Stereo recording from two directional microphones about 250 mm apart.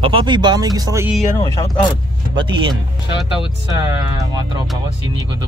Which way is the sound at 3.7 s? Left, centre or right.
Centre.